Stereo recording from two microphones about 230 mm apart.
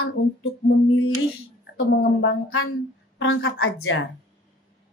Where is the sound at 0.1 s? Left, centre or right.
Left.